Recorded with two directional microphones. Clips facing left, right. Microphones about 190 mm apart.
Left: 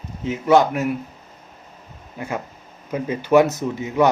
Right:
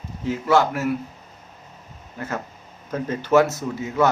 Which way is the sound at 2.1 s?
15° left (ahead or behind).